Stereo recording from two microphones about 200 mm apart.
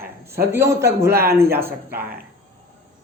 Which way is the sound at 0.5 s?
15° right (ahead or behind).